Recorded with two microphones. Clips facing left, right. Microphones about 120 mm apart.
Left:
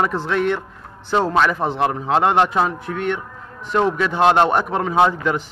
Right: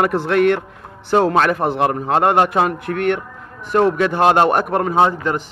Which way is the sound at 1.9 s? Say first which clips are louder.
Right 2 dB; 50° right (ahead or behind).